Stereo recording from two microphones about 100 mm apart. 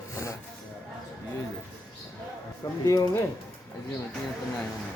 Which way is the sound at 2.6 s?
35° left (ahead or behind).